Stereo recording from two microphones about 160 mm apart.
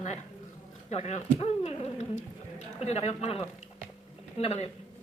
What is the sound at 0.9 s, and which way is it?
A man's voice, 45° left (ahead or behind).